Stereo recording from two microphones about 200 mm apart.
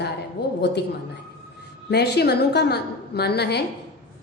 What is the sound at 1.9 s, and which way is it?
A woman's voice, 55° left (ahead or behind).